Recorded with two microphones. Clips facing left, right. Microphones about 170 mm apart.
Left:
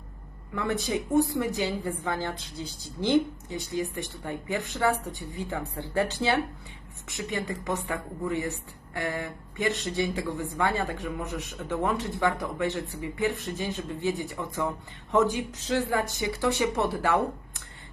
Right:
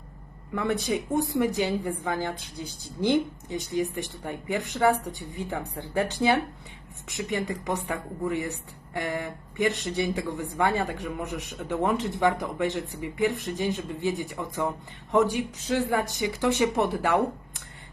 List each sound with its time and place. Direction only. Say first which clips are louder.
0.5 s speech: right 2 dB; 15° right (ahead or behind)